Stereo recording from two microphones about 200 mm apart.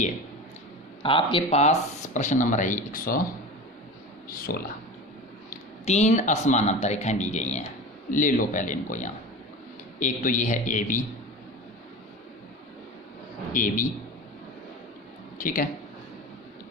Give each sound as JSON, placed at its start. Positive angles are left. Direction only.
{"t": 1.0, "sound": "speech", "side_deg": 25}
{"t": 4.3, "sound": "speech", "side_deg": 45}
{"t": 5.5, "sound": "speech", "side_deg": 35}
{"t": 13.5, "sound": "speech", "side_deg": 40}
{"t": 15.4, "sound": "speech", "side_deg": 45}